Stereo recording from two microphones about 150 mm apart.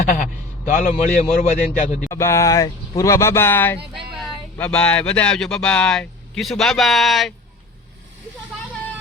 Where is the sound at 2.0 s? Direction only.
20° left (ahead or behind); by 7.3 s centre (ahead or behind).